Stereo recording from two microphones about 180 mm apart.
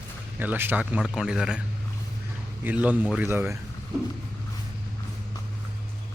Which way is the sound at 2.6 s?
10° right (ahead or behind).